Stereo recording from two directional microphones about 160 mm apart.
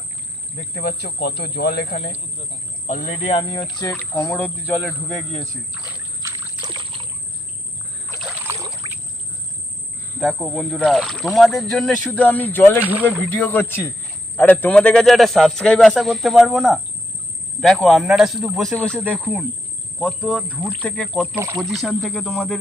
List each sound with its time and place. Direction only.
0.8 s speech: 75° left (ahead or behind)
2.8 s speech: 50° left (ahead or behind)
3.3 s speech: 30° left (ahead or behind)
3.9 s speech: 15° left (ahead or behind)
6.2 s trickle: 30° right (ahead or behind)
8.4 s trickle: 20° right (ahead or behind)
10.2 s speech: centre (ahead or behind)
12.8 s speech: 10° right (ahead or behind)
13.3 s speech: 10° left (ahead or behind)
21.3 s speech: 20° right (ahead or behind)
21.6 s speech: centre (ahead or behind)